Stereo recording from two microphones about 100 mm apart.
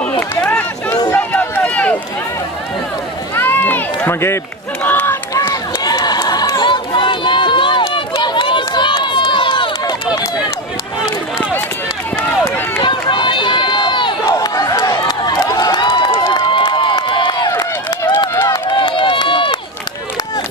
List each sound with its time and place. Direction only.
0.4 s run: 15° left (ahead or behind)
3.3 s run: 20° left (ahead or behind)
4.8 s crowd: 20° left (ahead or behind)
5.3 s run: 35° left (ahead or behind); by 9.9 s 50° left (ahead or behind)
12.8 s run: 50° left (ahead or behind)
14.4 s crowd: 40° left (ahead or behind)
15.9 s crowd: 55° left (ahead or behind)
17.5 s run: 35° left (ahead or behind)
18.5 s run: 50° left (ahead or behind)